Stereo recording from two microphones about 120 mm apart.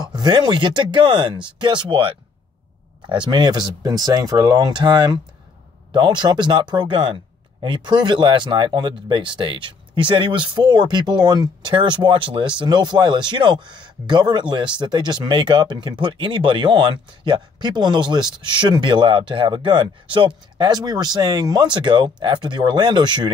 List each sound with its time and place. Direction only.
0.0 s speech: 35° right (ahead or behind)